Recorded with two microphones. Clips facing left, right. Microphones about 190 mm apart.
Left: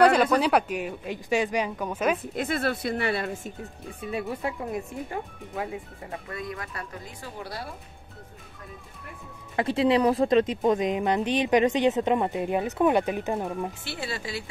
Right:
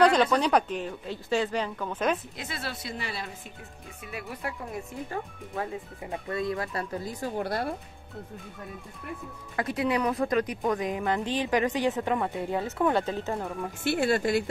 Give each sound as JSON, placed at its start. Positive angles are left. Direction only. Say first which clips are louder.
{"t": 0.0, "sound": "a woman's voice", "louder": "left 2 dB", "side_deg": 10}
{"t": 2.3, "sound": "speech", "louder": "left 10 dB", "side_deg": 55}
{"t": 4.0, "sound": "a woman's voice", "louder": "left 6 dB", "side_deg": 25}
{"t": 6.3, "sound": "speech", "louder": "right 8 dB", "side_deg": -30}
{"t": 7.3, "sound": "speech", "louder": "right 7 dB", "side_deg": -55}
{"t": 9.6, "sound": "a woman's voice", "louder": "left 5 dB", "side_deg": 25}
{"t": 13.8, "sound": "speech", "louder": "right 9 dB", "side_deg": -50}